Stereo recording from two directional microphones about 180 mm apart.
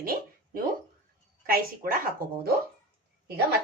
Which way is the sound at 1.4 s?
55° right (ahead or behind).